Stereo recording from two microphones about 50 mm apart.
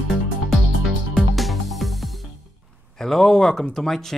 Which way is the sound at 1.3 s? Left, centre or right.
Centre.